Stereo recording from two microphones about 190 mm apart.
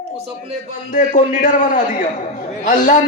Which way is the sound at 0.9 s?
40° left (ahead or behind).